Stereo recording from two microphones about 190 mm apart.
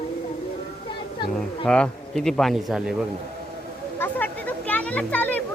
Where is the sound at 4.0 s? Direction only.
10° left (ahead or behind).